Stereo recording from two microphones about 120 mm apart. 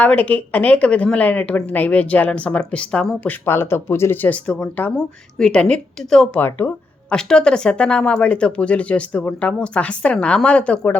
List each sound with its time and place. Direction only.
0.0 s speech: 10° left (ahead or behind)
3.4 s speech: 20° left (ahead or behind)